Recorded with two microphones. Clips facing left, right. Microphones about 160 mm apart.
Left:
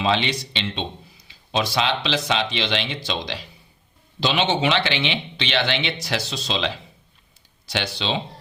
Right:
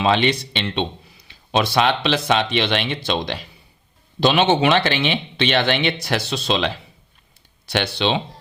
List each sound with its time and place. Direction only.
0.0 s speech: 55° right (ahead or behind)
7.7 s speech: 60° right (ahead or behind)